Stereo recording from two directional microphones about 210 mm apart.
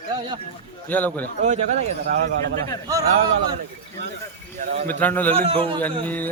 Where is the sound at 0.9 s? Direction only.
10° left (ahead or behind).